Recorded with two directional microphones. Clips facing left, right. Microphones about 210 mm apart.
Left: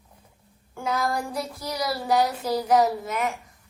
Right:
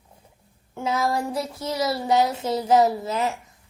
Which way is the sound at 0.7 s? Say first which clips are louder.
Right 2 dB; 25° right (ahead or behind).